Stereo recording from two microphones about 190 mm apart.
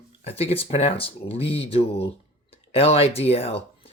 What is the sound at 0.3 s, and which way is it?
Speech, 30° left (ahead or behind).